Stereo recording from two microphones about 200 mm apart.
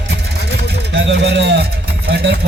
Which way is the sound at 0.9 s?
60° right (ahead or behind).